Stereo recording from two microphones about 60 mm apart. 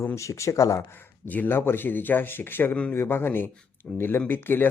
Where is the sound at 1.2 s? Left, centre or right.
Left.